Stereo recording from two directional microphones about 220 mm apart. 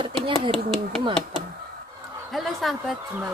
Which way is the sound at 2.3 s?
Centre (ahead or behind).